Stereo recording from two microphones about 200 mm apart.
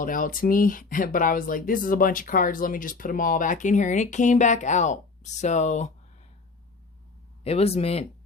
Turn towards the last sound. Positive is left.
turn(degrees=30)  # may be behind; listen again after turning